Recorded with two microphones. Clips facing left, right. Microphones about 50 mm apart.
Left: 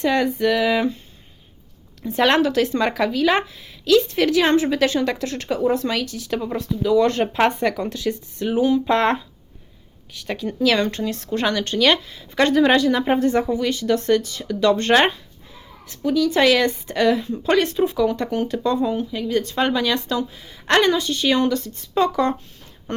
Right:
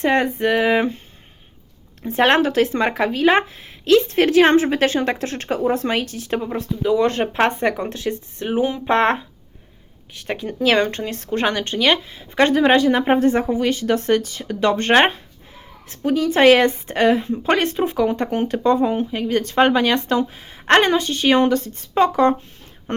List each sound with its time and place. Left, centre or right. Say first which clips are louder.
0.0 s speech: right 1 dB; right
2.0 s speech: right 1 dB; right
6.6 s a woman's voice: left 1 dB; right